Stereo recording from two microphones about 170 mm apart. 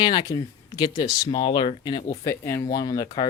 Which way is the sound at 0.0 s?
25° left (ahead or behind).